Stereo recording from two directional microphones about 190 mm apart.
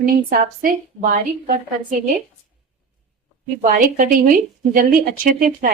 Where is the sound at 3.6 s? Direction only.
45° right (ahead or behind).